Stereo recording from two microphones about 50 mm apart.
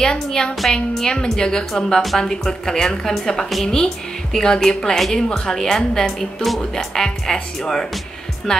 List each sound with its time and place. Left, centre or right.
0.0 s a woman's voice: centre
3.4 s a woman's voice: centre
3.7 s speech: centre